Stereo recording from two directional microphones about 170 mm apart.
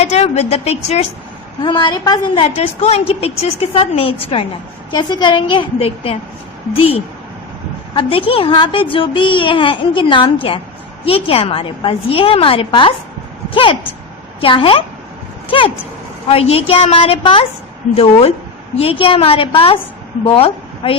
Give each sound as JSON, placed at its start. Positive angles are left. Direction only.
{"t": 0.0, "sound": "a woman's voice", "side_deg": 40}
{"t": 1.6, "sound": "a woman's voice", "side_deg": 25}
{"t": 7.9, "sound": "a child's voice", "side_deg": 30}